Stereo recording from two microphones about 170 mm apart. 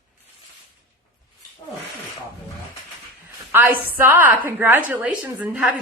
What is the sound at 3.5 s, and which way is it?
A woman's voice, 10° right (ahead or behind).